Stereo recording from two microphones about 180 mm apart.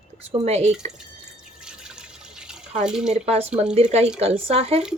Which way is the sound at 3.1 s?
35° right (ahead or behind).